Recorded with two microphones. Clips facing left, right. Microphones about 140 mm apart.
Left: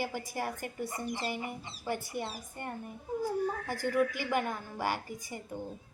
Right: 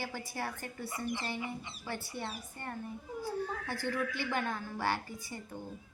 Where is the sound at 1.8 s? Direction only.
15° left (ahead or behind).